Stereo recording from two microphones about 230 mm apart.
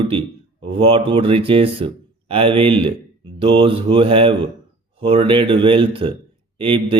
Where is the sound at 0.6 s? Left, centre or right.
Right.